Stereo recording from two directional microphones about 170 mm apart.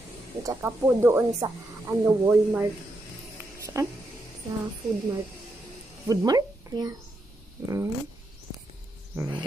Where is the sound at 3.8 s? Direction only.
20° right (ahead or behind).